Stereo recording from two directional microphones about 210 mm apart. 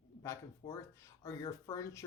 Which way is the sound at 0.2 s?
15° left (ahead or behind).